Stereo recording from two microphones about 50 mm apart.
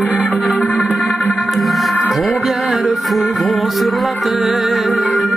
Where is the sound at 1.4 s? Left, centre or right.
Centre.